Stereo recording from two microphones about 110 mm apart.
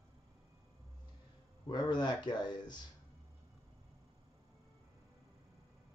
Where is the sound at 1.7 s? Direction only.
40° left (ahead or behind).